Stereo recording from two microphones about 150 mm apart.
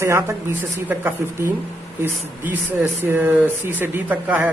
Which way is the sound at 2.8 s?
15° right (ahead or behind).